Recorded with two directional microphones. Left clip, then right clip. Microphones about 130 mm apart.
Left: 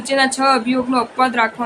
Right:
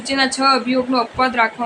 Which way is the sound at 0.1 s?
30° left (ahead or behind).